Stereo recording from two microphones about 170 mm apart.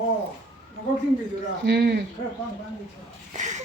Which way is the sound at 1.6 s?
90° right.